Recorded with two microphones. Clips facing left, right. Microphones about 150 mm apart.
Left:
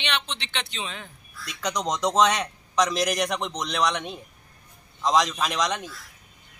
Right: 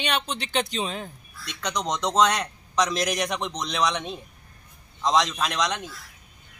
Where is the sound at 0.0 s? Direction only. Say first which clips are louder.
Right 3 dB; 45° right (ahead or behind).